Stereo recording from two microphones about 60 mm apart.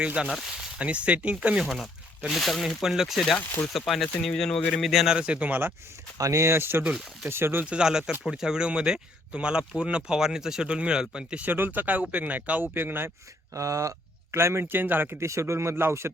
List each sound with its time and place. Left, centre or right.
0.0 s speech: centre
0.8 s speech: right
1.6 s speech: centre
4.8 s speech: centre
5.1 s speech: centre
6.1 s speech: right
6.4 s speech: right
6.8 s speech: centre
7.3 s speech: right
7.6 s speech: centre
11.5 s speech: right
13.5 s speech: right
14.3 s speech: right
15.2 s speech: right